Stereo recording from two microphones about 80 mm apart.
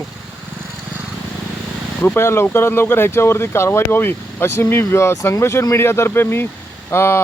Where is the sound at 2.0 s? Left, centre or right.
Left.